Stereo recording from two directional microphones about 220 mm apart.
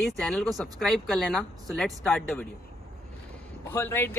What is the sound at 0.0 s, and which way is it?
Speech, 5° left (ahead or behind).